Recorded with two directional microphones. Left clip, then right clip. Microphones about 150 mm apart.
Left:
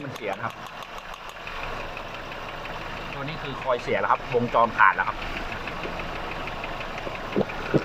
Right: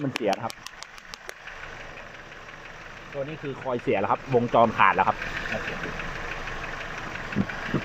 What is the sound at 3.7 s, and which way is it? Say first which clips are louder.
Speech: left 2 dB; 20° right (ahead or behind).